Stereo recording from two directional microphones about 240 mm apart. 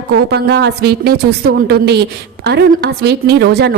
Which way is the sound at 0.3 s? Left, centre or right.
Right.